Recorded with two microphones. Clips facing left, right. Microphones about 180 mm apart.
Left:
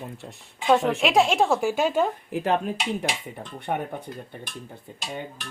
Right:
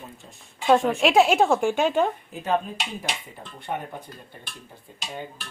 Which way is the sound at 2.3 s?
70° left (ahead or behind).